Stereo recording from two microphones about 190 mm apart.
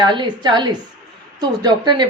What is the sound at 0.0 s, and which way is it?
Speech, 25° right (ahead or behind).